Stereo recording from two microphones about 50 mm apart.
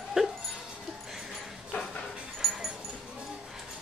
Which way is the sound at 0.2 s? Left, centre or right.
Centre.